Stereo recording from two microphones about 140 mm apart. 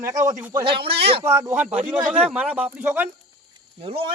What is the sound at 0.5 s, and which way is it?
Speech, 35° right (ahead or behind).